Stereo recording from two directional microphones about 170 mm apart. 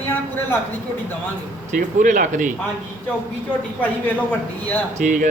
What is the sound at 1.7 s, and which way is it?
Speech, 50° right (ahead or behind).